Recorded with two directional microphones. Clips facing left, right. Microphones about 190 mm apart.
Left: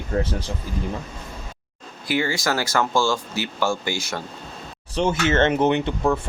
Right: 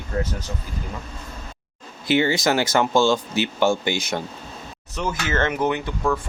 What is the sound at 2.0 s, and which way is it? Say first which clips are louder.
Speech: right 4 dB; 20° right (ahead or behind).